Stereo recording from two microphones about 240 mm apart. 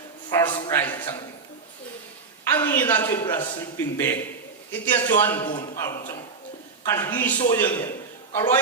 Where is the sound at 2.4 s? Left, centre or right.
Centre.